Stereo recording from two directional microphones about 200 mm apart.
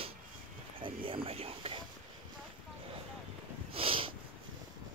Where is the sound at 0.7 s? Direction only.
25° right (ahead or behind).